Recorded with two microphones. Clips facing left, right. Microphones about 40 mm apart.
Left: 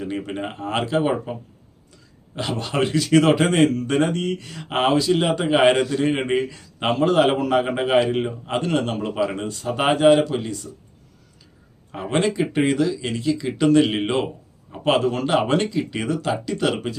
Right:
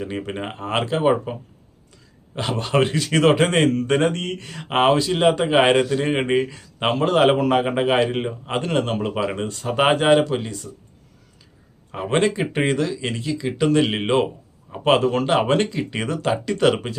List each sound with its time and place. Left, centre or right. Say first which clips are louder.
0.0 s speech: even; centre; by 4.4 s right
4.4 s speech: right 5 dB; right
7.6 s speech: right 2 dB; centre
7.9 s speech: left 2 dB; right
12.1 s speech: even; right
13.2 s speech: left 2 dB; centre